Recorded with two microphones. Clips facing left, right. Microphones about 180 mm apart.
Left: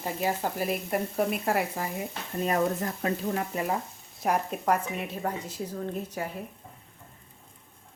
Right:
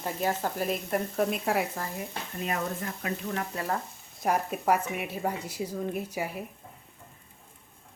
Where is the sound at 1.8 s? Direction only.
15° left (ahead or behind).